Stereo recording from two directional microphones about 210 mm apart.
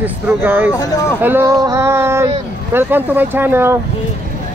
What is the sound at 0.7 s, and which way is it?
Speech, 15° left (ahead or behind).